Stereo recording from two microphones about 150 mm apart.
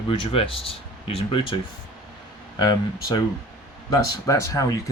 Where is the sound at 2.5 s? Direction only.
25° left (ahead or behind).